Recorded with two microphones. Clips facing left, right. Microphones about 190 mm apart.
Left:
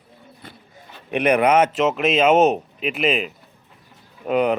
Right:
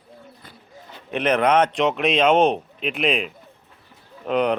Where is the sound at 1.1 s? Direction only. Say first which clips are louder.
Left 2 dB; 10° left (ahead or behind).